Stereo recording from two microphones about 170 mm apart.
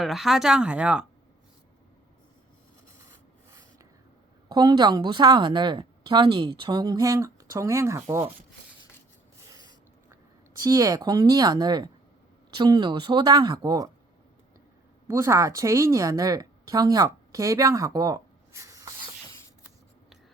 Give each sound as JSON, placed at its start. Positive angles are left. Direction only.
{"t": 0.0, "sound": "speech", "side_deg": 0}
{"t": 3.0, "sound": "rub", "side_deg": -15}
{"t": 4.4, "sound": "a woman's voice", "side_deg": -25}
{"t": 9.5, "sound": "a sound", "side_deg": -20}
{"t": 10.6, "sound": "a woman's voice", "side_deg": -20}
{"t": 15.0, "sound": "a woman's voice", "side_deg": -15}